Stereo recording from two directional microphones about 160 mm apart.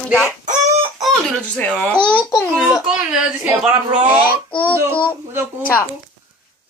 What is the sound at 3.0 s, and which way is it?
Speech, 10° right (ahead or behind).